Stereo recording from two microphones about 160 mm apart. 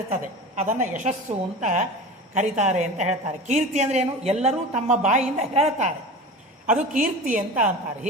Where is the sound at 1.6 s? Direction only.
50° right (ahead or behind).